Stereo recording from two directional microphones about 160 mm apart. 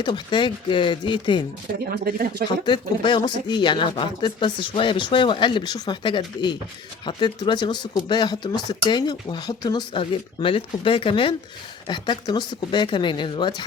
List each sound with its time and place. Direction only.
0.0 s speech: 30° left (ahead or behind)
1.9 s speech: 75° right (ahead or behind)
2.6 s speech: 30° left (ahead or behind)